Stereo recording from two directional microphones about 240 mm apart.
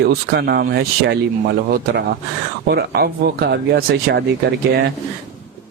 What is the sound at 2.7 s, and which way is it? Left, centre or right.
Speech, right.